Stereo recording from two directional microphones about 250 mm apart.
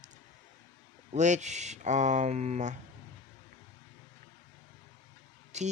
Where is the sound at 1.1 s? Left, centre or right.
Right.